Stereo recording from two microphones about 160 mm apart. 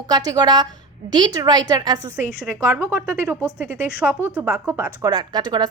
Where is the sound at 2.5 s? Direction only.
15° right (ahead or behind).